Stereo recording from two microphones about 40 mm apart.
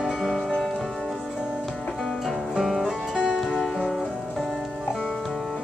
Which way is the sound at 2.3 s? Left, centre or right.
Centre.